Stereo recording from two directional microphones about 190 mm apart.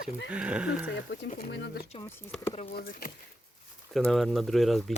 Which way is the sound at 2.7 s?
55° left (ahead or behind).